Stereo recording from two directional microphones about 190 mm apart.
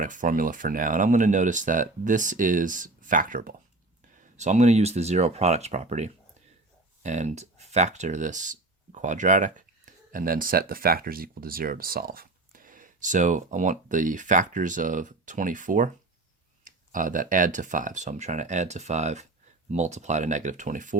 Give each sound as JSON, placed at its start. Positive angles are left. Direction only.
{"t": 0.0, "sound": "speech", "side_deg": -45}